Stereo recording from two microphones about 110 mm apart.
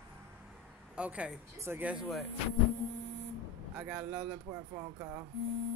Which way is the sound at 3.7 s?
10° right (ahead or behind).